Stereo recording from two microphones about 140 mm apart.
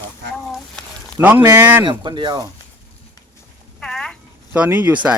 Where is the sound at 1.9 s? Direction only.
35° right (ahead or behind).